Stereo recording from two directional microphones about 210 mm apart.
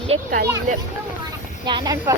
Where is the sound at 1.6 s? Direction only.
20° right (ahead or behind).